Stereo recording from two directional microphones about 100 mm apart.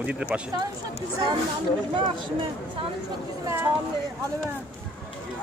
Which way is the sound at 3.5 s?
25° right (ahead or behind).